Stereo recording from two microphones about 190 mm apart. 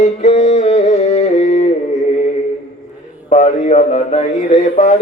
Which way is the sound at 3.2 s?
40° left (ahead or behind).